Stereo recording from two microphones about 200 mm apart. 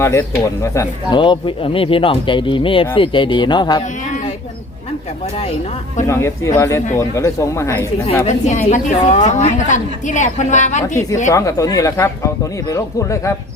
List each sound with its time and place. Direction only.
0.0 s speech: 15° left (ahead or behind)
6.1 s speech: 15° left (ahead or behind)
8.3 s a woman's voice: 40° left (ahead or behind)
11.3 s speech: 15° left (ahead or behind)